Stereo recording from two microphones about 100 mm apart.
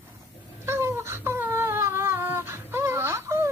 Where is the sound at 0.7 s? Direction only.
25° right (ahead or behind).